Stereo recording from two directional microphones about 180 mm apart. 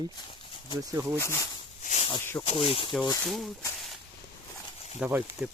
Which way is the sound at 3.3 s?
Centre (ahead or behind).